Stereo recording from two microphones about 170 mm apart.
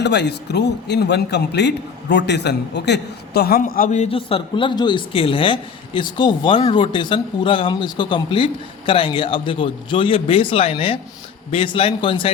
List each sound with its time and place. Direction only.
0.0 s a man's voice: 90° left; by 4.1 s 45° left (ahead or behind)
4.1 s a man's voice: 35° left (ahead or behind)